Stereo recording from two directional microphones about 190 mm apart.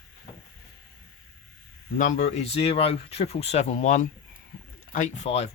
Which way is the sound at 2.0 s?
40° left (ahead or behind).